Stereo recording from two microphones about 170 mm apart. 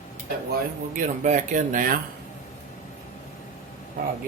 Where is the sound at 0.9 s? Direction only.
45° right (ahead or behind).